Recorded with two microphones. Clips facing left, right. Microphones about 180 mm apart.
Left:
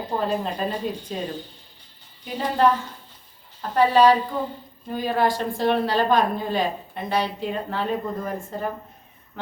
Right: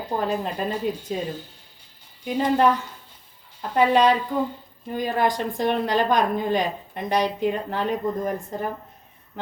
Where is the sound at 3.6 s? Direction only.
15° right (ahead or behind).